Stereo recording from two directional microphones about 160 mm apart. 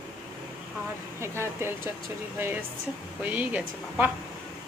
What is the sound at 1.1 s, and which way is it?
Speech, 15° right (ahead or behind).